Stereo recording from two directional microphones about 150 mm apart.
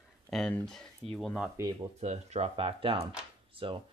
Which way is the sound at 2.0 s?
45° right (ahead or behind).